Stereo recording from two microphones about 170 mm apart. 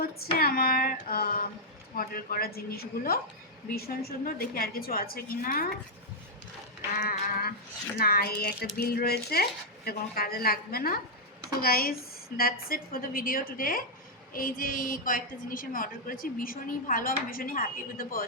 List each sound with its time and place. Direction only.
0.0 s female singing: 60° left (ahead or behind)
2.0 s a woman's voice: 60° left (ahead or behind)
7.0 s a woman's voice: 60° left (ahead or behind)